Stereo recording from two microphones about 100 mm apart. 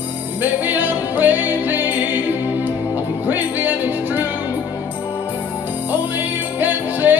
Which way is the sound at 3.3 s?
20° right (ahead or behind).